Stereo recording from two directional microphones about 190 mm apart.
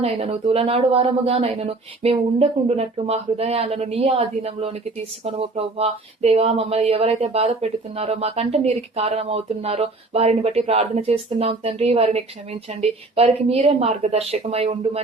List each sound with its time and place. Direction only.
0.0 s speech: 30° right (ahead or behind)